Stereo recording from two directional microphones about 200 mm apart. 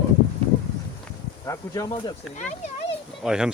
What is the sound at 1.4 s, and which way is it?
Speech, 15° left (ahead or behind).